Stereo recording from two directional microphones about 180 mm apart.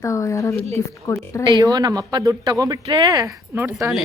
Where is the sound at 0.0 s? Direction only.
15° left (ahead or behind).